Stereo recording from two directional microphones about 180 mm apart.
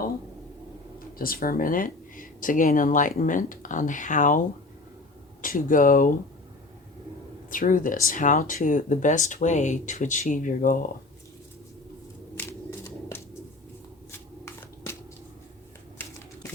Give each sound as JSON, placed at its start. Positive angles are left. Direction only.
{"t": 1.2, "sound": "speech", "side_deg": 55}
{"t": 5.4, "sound": "speech", "side_deg": 50}
{"t": 7.5, "sound": "speech", "side_deg": 50}
{"t": 12.4, "sound": "a sound", "side_deg": 15}
{"t": 14.1, "sound": "shuffling cards", "side_deg": 15}